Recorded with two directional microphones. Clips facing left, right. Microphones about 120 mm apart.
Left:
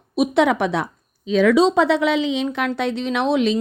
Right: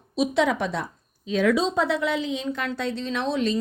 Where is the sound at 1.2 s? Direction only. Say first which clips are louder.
Left 7 dB; 90° left.